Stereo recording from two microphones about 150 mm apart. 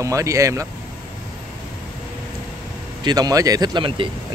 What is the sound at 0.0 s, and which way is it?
Speech, 20° right (ahead or behind).